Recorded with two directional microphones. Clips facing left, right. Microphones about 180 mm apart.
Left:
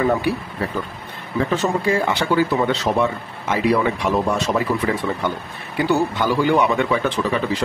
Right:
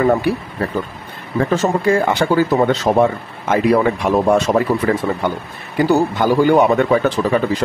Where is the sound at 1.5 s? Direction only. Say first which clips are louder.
Right 5 dB; 45° right (ahead or behind).